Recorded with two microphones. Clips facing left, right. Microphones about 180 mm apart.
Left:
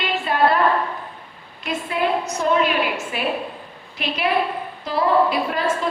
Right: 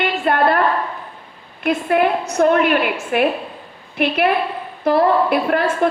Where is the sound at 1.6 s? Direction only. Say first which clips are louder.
Right 6 dB; 60° right (ahead or behind).